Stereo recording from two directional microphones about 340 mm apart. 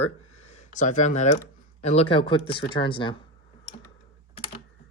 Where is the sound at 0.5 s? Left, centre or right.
Left.